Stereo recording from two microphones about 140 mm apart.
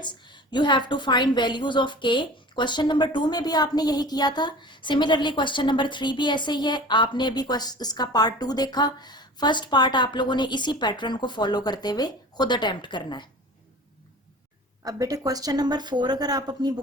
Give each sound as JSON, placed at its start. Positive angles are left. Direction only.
{"t": 0.0, "sound": "a woman's voice", "side_deg": 35}
{"t": 14.8, "sound": "a woman's voice", "side_deg": -25}